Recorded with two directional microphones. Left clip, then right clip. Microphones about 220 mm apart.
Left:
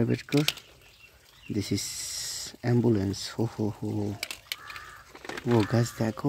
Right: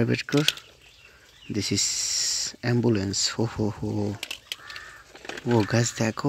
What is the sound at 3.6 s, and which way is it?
Speech, 15° right (ahead or behind).